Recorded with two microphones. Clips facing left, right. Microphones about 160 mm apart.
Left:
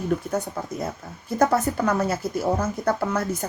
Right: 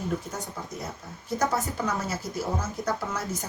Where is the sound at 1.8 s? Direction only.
60° left (ahead or behind).